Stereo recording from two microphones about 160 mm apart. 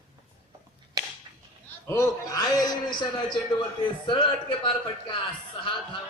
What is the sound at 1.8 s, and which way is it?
A man's voice, 15° left (ahead or behind).